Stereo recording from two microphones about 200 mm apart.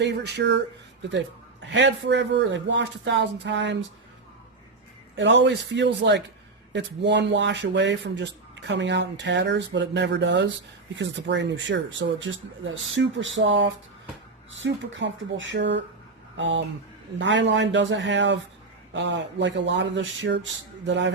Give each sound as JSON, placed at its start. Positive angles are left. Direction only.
{"t": 0.0, "sound": "speech", "side_deg": -60}
{"t": 1.7, "sound": "speech", "side_deg": -60}
{"t": 5.1, "sound": "speech", "side_deg": -65}